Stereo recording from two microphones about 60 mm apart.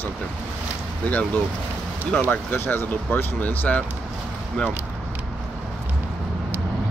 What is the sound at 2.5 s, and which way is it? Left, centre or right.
Speech, left.